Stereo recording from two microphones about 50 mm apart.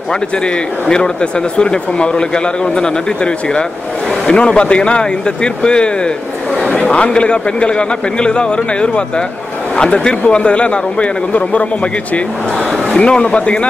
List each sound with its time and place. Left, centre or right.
0.1 s speech: centre